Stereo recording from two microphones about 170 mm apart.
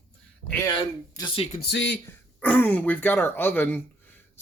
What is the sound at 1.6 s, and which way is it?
Speech, 85° left.